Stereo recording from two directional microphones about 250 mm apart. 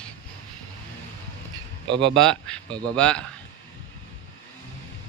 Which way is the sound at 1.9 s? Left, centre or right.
Right.